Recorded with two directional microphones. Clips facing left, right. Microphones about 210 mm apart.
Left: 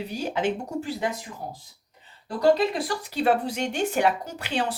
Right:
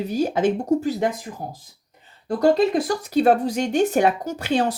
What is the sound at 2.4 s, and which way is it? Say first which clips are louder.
Speech: right 3 dB; 45° right (ahead or behind).